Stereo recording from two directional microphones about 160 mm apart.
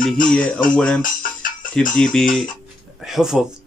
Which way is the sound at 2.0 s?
5° left (ahead or behind).